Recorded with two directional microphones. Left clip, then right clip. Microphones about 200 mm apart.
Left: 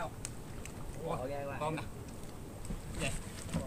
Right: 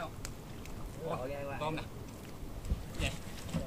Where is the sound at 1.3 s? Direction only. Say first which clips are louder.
Even; centre (ahead or behind).